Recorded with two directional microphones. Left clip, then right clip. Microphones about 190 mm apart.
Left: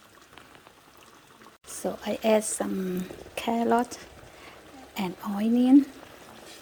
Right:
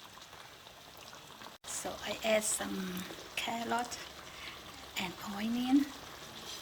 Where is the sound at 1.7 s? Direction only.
40° left (ahead or behind).